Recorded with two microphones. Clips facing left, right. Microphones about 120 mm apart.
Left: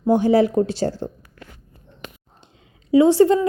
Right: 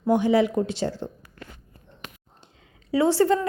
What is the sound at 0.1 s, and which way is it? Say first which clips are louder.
Speech: left 4 dB; 35° left (ahead or behind).